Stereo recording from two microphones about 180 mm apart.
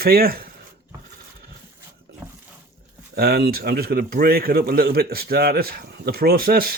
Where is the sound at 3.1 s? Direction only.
60° right (ahead or behind).